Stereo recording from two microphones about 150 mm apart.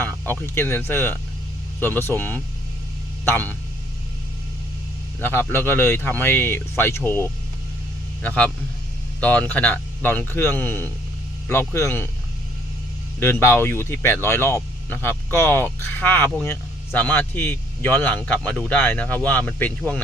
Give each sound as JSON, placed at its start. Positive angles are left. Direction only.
{"t": 0.0, "sound": "speech", "side_deg": 15}
{"t": 5.2, "sound": "speech", "side_deg": 15}
{"t": 13.1, "sound": "speech", "side_deg": 15}